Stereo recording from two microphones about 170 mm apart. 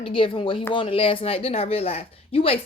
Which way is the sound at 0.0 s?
30° left (ahead or behind).